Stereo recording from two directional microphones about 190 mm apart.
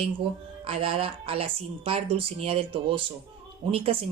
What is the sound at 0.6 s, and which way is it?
Speech, 30° right (ahead or behind).